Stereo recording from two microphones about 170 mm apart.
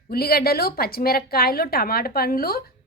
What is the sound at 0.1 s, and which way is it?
A woman's voice, 65° left (ahead or behind).